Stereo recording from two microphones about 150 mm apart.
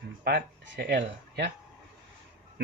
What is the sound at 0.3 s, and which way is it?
Speech, 85° right.